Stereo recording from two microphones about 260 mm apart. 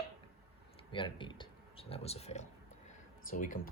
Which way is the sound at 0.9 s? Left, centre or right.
Centre.